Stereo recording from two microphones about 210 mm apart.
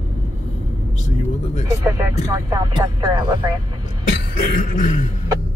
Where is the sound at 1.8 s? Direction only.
15° right (ahead or behind).